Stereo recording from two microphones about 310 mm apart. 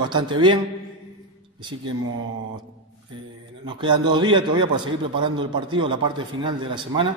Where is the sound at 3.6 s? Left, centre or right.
Centre.